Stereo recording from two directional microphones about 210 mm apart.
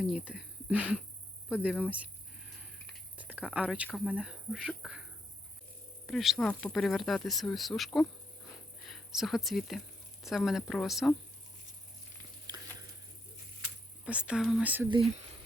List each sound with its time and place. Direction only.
0.0 s speech: centre (ahead or behind)
2.8 s a sound: 5° right (ahead or behind)
3.8 s speech: centre (ahead or behind)
6.1 s speech: centre (ahead or behind)
12.5 s a sound: 20° right (ahead or behind)
14.0 s speech: 5° right (ahead or behind)